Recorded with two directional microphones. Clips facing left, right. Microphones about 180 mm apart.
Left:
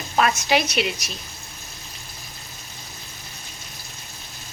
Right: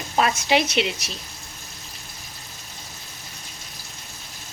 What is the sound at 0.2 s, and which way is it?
Speech, 25° right (ahead or behind).